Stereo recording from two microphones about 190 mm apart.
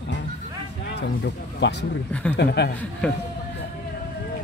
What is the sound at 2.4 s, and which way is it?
Speech, 60° left (ahead or behind).